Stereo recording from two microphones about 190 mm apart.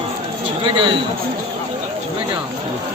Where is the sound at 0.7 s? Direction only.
25° right (ahead or behind).